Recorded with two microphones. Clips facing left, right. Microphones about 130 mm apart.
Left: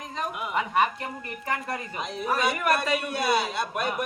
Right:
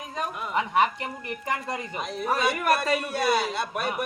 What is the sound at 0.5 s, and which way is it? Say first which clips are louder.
Speech: right 1 dB; 15° right (ahead or behind).